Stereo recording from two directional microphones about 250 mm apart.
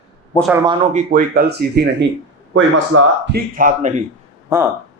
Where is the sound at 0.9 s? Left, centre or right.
Right.